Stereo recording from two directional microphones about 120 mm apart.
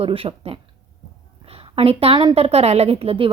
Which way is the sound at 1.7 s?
55° right (ahead or behind).